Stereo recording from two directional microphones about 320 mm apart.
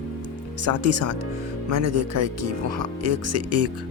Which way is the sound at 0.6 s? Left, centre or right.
Right.